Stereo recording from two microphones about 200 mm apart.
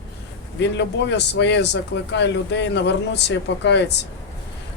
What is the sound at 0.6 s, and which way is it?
A man's voice, 60° left (ahead or behind).